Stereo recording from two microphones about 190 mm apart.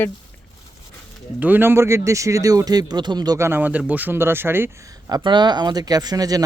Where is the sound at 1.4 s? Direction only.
10° right (ahead or behind).